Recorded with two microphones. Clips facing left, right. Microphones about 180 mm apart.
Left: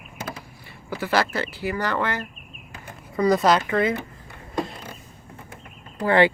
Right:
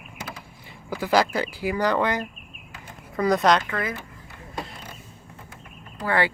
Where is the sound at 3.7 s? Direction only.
25° left (ahead or behind).